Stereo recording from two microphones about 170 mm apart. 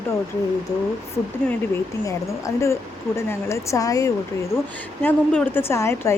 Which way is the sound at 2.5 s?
20° left (ahead or behind).